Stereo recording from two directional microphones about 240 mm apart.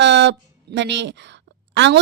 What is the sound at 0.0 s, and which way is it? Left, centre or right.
A woman's voice, right.